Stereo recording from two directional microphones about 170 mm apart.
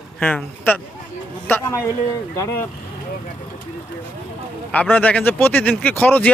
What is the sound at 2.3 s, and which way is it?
Speech, 20° left (ahead or behind).